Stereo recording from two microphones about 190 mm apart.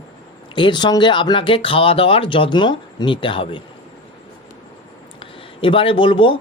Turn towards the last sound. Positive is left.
turn(degrees=25)  # may be behind; listen again after turning